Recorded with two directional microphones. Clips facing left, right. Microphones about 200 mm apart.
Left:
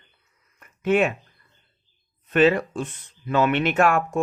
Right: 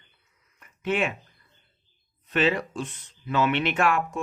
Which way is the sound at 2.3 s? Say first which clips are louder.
Left 6 dB; 50° left (ahead or behind).